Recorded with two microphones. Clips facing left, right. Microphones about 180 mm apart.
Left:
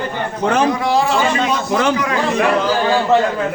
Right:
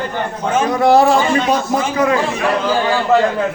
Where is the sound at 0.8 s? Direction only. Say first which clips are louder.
Right 6 dB; 55° right (ahead or behind).